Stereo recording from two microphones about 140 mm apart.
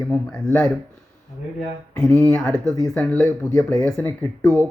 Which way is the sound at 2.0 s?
20° left (ahead or behind).